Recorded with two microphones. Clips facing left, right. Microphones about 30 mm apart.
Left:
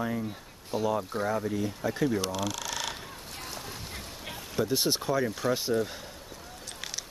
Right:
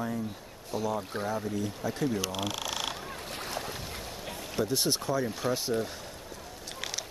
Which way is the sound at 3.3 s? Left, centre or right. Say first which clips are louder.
Right 4 dB; right.